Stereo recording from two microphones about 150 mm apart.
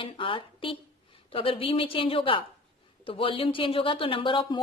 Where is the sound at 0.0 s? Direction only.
35° left (ahead or behind).